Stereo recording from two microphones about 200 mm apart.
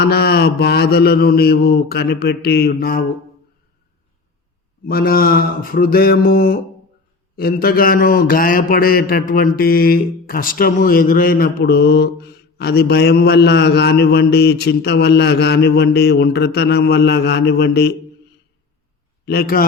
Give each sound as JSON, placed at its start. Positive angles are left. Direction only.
{"t": 0.0, "sound": "a man's voice", "side_deg": 55}
{"t": 4.9, "sound": "a man's voice", "side_deg": 45}
{"t": 19.2, "sound": "a man's voice", "side_deg": 50}